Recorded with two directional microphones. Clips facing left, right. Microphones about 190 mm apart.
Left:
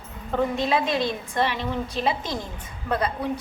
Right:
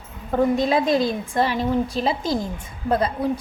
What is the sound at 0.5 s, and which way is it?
A woman's voice, 40° right (ahead or behind).